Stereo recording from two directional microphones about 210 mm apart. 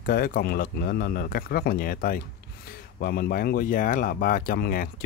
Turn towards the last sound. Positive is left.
turn(degrees=45)  # may be behind; listen again after turning